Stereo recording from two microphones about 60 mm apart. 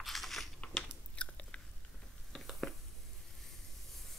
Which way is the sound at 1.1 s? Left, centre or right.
Centre.